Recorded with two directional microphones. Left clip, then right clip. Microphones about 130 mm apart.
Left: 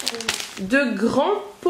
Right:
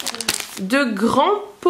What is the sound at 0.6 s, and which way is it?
Speech, 40° right (ahead or behind).